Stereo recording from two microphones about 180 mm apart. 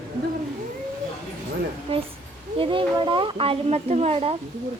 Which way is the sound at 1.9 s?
35° right (ahead or behind).